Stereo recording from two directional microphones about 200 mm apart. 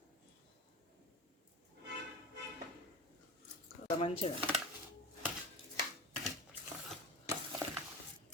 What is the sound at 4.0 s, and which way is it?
Speech, 30° left (ahead or behind).